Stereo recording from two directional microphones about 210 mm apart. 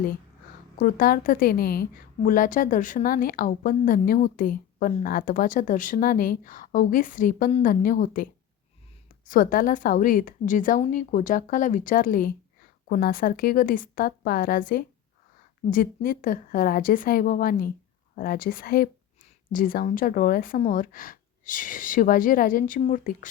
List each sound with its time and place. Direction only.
0.8 s a woman's voice: 40° left (ahead or behind)